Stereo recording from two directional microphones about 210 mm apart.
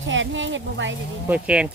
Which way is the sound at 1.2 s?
5° right (ahead or behind).